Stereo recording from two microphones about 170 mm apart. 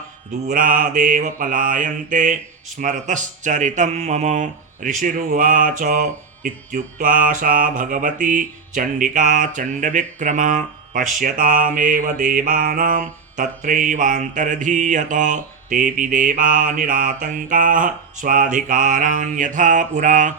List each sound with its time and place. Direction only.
0.4 s speech: 55° right (ahead or behind)